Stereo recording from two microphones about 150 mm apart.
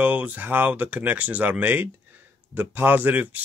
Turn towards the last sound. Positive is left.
turn(degrees=-10)  # may be behind; listen again after turning